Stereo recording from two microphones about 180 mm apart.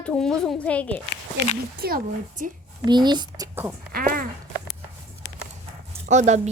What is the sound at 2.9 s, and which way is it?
Speech, 25° right (ahead or behind).